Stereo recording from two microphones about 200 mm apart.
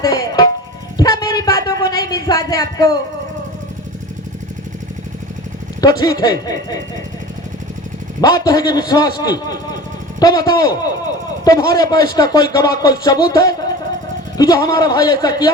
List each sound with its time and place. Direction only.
0.0 s music: 20° left (ahead or behind)
1.2 s a sound: 20° left (ahead or behind)
6.0 s speech: 20° left (ahead or behind)
8.2 s a man's voice: 20° left (ahead or behind)